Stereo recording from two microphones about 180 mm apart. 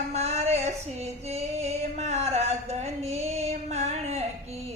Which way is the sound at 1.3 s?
35° right (ahead or behind).